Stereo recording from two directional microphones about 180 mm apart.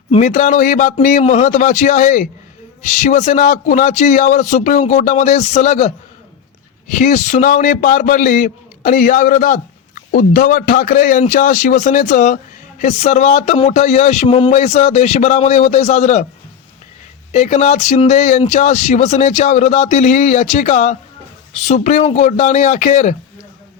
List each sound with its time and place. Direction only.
0.1 s a man's voice: 45° left (ahead or behind)
17.3 s speech: 40° left (ahead or behind)